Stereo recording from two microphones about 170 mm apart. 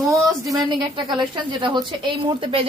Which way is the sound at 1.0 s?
25° right (ahead or behind).